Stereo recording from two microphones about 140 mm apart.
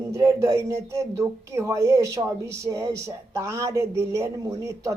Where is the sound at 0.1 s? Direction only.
20° right (ahead or behind).